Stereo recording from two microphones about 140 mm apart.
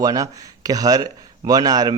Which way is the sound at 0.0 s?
25° right (ahead or behind).